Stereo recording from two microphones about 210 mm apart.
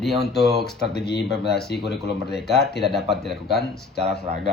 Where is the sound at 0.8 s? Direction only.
50° left (ahead or behind).